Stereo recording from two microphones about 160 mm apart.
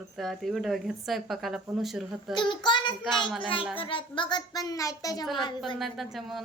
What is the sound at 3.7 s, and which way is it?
A child's voice, 30° left (ahead or behind).